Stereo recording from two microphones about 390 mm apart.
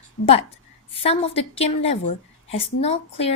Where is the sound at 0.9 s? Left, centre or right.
Centre.